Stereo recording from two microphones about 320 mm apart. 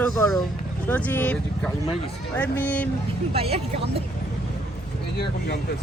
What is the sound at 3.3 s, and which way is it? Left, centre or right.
Speech, centre.